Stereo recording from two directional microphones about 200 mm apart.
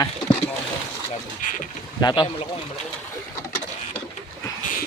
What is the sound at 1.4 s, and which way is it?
Speech, 40° left (ahead or behind).